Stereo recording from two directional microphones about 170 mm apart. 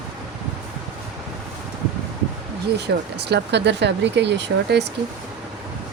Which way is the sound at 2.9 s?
70° right (ahead or behind).